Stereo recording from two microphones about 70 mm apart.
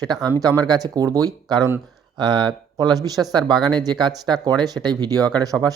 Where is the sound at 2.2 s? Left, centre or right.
Right.